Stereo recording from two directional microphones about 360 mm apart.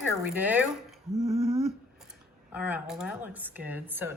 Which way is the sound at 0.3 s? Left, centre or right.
Centre.